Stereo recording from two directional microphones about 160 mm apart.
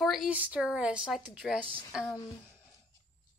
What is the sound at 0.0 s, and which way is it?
Speech, centre (ahead or behind).